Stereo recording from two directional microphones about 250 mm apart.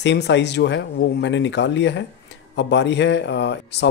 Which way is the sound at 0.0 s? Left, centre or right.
Left.